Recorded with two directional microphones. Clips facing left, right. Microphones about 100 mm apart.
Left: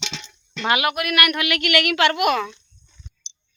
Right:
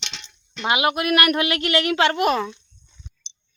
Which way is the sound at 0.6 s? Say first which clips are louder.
Right 1 dB; 25° right (ahead or behind).